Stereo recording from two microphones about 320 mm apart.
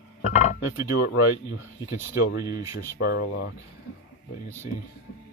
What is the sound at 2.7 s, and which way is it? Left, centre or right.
Speech, left.